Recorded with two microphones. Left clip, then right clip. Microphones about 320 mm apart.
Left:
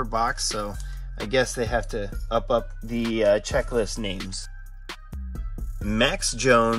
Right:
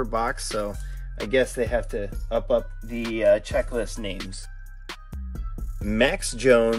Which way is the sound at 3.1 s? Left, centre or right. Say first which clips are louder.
Right 1 dB; left.